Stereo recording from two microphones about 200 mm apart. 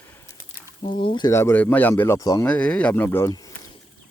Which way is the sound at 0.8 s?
25° left (ahead or behind).